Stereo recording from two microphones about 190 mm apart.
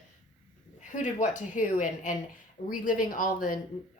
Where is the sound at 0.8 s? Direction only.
40° left (ahead or behind).